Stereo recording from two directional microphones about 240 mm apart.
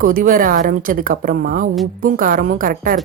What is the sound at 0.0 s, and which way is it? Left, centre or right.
Speech, right.